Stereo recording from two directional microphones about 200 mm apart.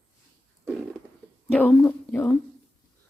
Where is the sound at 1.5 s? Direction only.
5° left (ahead or behind).